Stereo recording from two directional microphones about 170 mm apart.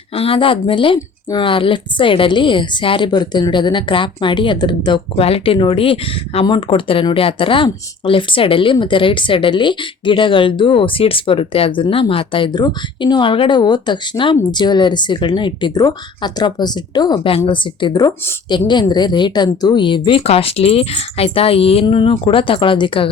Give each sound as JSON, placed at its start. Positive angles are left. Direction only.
{"t": 0.1, "sound": "a woman's voice", "side_deg": 35}